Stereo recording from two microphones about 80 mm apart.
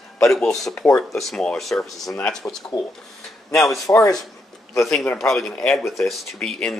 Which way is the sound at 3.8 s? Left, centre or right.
Left.